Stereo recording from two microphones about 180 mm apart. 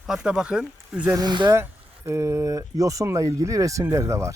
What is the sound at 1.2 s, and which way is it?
Speech, 25° right (ahead or behind).